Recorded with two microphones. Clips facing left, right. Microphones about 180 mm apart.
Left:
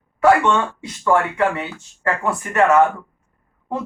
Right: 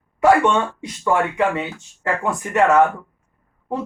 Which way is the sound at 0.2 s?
15° right (ahead or behind).